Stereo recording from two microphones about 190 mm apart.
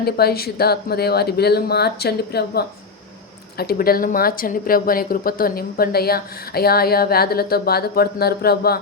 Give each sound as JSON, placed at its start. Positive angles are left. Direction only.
{"t": 0.0, "sound": "speech", "side_deg": 55}